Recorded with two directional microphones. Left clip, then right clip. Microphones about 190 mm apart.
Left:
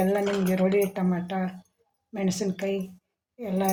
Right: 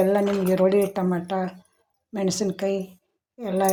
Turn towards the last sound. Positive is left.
turn(degrees=-35)  # may be behind; listen again after turning